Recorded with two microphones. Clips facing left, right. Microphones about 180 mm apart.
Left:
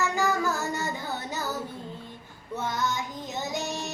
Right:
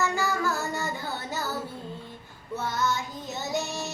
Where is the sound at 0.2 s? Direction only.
20° left (ahead or behind).